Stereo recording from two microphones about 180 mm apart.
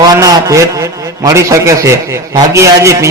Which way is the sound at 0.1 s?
20° right (ahead or behind).